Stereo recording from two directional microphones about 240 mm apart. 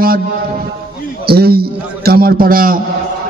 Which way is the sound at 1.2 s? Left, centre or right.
Right.